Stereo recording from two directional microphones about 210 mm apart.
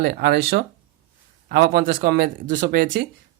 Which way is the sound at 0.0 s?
50° right (ahead or behind).